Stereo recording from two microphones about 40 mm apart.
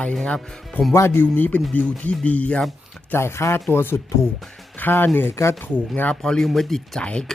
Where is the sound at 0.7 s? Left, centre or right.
Left.